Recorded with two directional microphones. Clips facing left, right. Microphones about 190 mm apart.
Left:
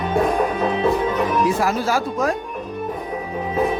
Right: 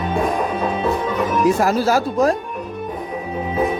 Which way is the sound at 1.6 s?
40° right (ahead or behind).